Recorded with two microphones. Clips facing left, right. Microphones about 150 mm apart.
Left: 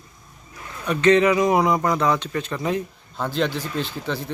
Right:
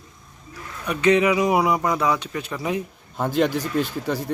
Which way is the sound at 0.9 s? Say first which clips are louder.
Left 2 dB; 10° right (ahead or behind).